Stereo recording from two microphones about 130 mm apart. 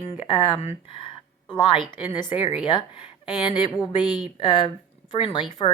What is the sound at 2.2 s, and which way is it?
Speech, 40° left (ahead or behind).